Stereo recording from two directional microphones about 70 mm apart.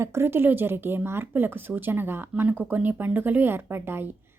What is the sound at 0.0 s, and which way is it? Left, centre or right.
A woman's voice, right.